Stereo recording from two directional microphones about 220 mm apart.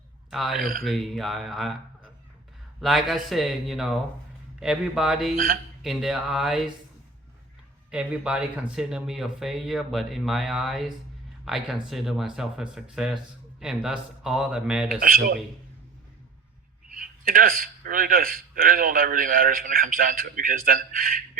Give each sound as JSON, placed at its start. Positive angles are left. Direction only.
{"t": 0.3, "sound": "speech", "side_deg": 0}
{"t": 2.8, "sound": "speech", "side_deg": 0}
{"t": 7.9, "sound": "speech", "side_deg": -5}
{"t": 16.9, "sound": "a man's voice", "side_deg": -40}